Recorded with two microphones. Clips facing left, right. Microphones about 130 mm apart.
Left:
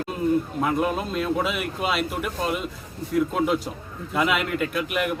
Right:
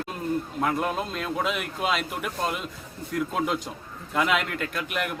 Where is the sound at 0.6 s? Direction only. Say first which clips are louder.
Left 3 dB; centre (ahead or behind).